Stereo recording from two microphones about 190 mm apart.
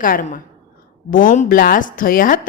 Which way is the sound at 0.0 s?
45° left (ahead or behind).